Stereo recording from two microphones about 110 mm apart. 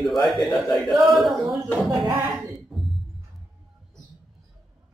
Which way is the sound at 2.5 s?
Centre (ahead or behind).